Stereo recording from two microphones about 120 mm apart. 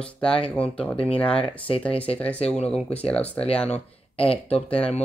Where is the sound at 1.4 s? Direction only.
50° left (ahead or behind).